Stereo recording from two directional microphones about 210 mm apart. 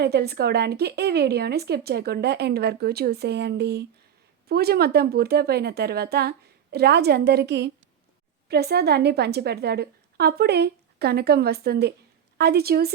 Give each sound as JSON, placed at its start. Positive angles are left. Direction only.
{"t": 0.0, "sound": "speech", "side_deg": -50}